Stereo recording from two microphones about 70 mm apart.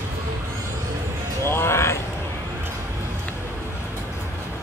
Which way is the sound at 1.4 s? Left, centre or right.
Left.